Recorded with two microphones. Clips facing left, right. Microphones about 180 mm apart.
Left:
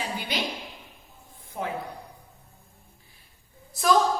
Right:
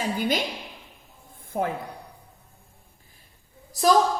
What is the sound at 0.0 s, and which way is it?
Speech, 45° right (ahead or behind).